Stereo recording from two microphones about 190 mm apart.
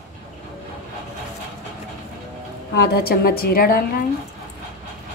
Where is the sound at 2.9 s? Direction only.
55° left (ahead or behind).